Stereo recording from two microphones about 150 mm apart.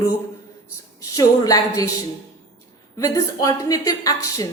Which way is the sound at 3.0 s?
25° left (ahead or behind).